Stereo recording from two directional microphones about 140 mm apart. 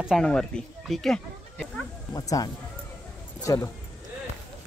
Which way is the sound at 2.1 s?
25° left (ahead or behind).